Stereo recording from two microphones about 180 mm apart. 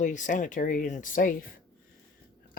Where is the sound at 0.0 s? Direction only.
45° left (ahead or behind).